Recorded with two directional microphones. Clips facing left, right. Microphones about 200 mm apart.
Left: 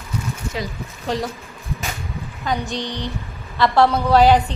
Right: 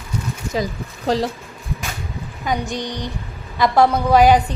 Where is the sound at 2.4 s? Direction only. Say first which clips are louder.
Right 1 dB; 15° right (ahead or behind).